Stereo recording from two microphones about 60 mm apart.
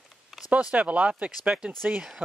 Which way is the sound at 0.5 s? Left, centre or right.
Right.